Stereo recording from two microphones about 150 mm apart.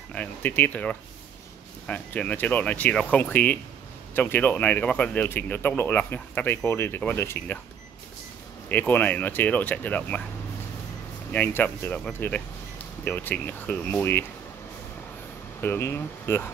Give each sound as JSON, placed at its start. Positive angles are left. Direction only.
{"t": 0.1, "sound": "speech", "side_deg": 10}
{"t": 8.6, "sound": "speech", "side_deg": 10}
{"t": 11.3, "sound": "speech", "side_deg": 10}
{"t": 15.6, "sound": "speech", "side_deg": 15}